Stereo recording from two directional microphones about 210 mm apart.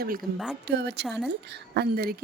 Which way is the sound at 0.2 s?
Centre (ahead or behind).